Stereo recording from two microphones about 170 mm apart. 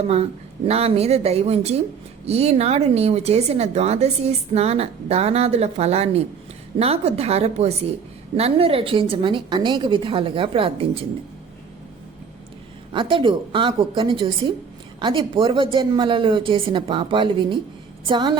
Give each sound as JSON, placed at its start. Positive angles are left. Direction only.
{"t": 0.7, "sound": "speech", "side_deg": -35}
{"t": 12.9, "sound": "a woman's voice", "side_deg": -30}